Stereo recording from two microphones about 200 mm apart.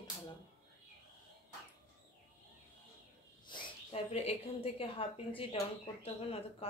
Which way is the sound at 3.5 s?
25° left (ahead or behind).